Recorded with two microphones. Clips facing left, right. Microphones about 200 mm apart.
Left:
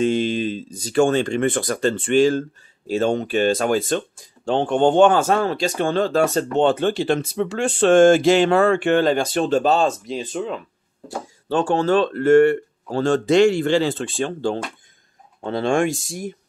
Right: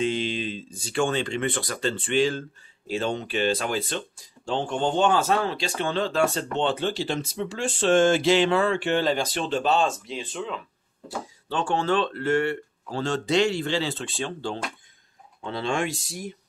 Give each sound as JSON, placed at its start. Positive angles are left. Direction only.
{"t": 0.0, "sound": "speech", "side_deg": 45}
{"t": 4.5, "sound": "speech", "side_deg": 60}